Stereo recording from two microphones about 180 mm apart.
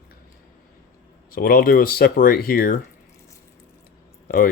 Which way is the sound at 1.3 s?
55° left (ahead or behind).